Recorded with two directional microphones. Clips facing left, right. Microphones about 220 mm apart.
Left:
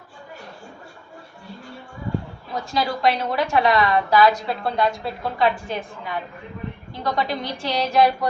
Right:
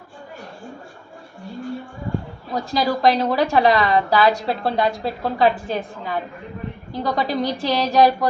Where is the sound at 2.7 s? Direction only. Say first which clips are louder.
Right 4 dB; 35° right (ahead or behind).